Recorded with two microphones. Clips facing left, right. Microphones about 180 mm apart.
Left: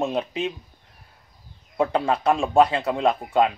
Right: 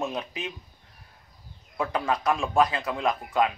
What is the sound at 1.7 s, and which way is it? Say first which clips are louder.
Speech: left 5 dB; 25° left (ahead or behind).